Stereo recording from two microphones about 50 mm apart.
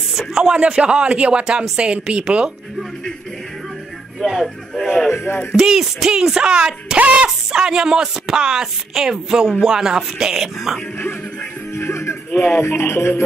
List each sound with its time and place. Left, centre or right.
0.1 s speech: centre
0.6 s speech: right
4.2 s speech: centre
5.1 s music: left
5.5 s speech: centre
7.0 s speech: right
7.2 s speech: centre
11.7 s music: left